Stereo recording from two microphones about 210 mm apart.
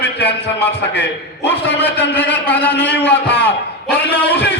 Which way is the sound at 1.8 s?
10° left (ahead or behind).